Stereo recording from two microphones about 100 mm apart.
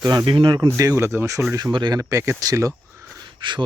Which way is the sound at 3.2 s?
50° right (ahead or behind).